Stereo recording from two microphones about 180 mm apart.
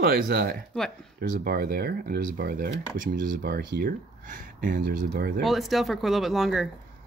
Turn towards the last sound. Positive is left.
turn(degrees=0)  # may be behind; listen again after turning